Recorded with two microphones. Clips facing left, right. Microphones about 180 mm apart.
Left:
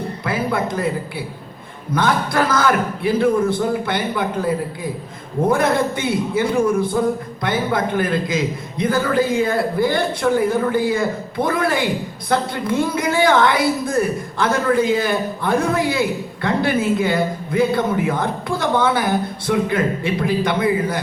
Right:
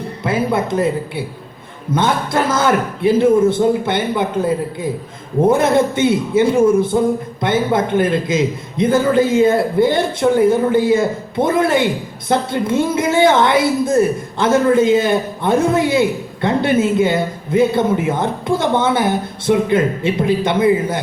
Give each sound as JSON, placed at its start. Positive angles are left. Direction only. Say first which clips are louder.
{"t": 0.3, "sound": "speech", "louder": "right 4 dB", "side_deg": -25}